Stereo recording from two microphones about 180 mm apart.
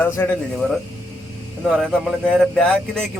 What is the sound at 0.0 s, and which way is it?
Speech, 10° left (ahead or behind).